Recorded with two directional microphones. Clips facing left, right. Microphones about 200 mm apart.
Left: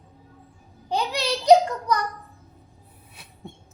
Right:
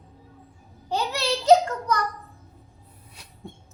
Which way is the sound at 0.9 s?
15° left (ahead or behind).